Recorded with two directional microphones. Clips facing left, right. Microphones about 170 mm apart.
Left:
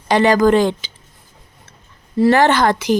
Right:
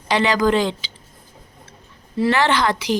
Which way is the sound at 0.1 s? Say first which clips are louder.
Left 5 dB; 45° left (ahead or behind).